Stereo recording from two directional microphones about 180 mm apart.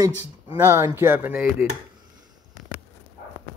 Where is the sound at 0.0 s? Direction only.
15° right (ahead or behind).